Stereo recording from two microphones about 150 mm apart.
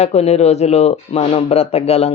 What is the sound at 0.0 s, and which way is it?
Speech, 45° left (ahead or behind).